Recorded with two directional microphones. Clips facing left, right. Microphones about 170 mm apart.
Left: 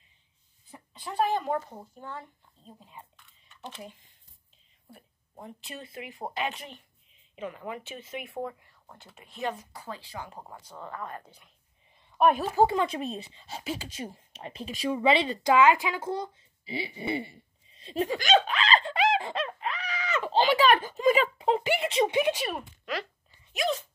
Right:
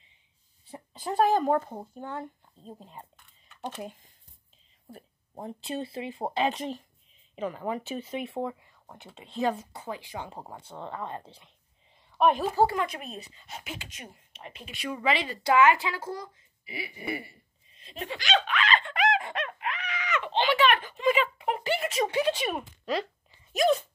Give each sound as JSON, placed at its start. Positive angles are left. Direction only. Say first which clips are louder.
{"t": 0.7, "sound": "speech", "louder": "right 6 dB", "side_deg": -35}
{"t": 9.8, "sound": "speech", "louder": "right 3 dB", "side_deg": -15}
{"t": 12.2, "sound": "a woman's voice", "louder": "left 1 dB", "side_deg": 5}
{"t": 12.7, "sound": "speech", "louder": "left 3 dB", "side_deg": 30}
{"t": 17.8, "sound": "speech", "louder": "left 6 dB", "side_deg": 35}
{"t": 21.5, "sound": "speech", "louder": "left 3 dB", "side_deg": 20}
{"t": 23.5, "sound": "speech", "louder": "right 6 dB", "side_deg": -45}